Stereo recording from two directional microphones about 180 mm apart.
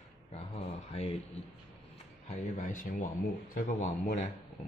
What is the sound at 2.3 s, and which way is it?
Speech, 45° left (ahead or behind).